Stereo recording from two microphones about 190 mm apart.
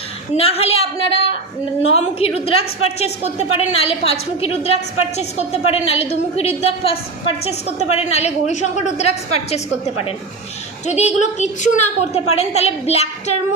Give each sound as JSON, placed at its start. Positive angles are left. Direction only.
{"t": 0.3, "sound": "a woman's voice", "side_deg": 30}